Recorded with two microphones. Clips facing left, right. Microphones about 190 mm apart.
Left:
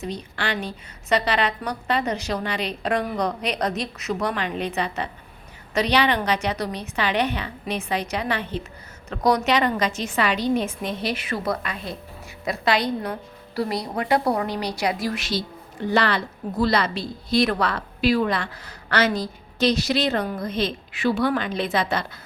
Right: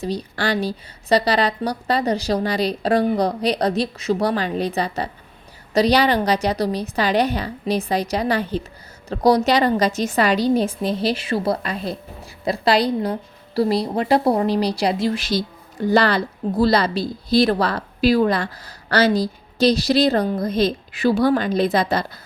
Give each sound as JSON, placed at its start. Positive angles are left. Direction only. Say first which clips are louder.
{"t": 0.0, "sound": "a woman's voice", "louder": "right 5 dB", "side_deg": -35}